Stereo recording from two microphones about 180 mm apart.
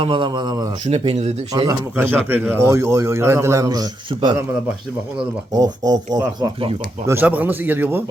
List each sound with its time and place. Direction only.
0.0 s a man's voice: 30° right (ahead or behind)
0.9 s speech: 35° right (ahead or behind)
1.6 s a man's voice: 10° right (ahead or behind)
5.5 s a man's voice: 20° right (ahead or behind)